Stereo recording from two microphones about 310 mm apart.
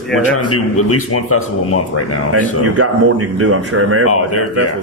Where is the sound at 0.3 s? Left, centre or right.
Left.